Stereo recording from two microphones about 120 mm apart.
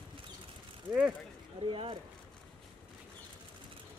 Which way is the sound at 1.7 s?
50° right (ahead or behind).